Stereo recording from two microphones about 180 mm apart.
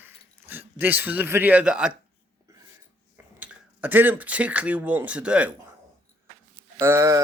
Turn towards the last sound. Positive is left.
turn(degrees=-15)  # may be behind; listen again after turning